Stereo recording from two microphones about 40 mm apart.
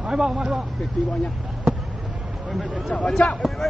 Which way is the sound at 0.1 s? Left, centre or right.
Right.